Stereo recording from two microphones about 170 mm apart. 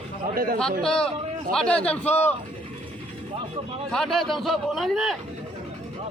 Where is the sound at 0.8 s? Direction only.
5° left (ahead or behind).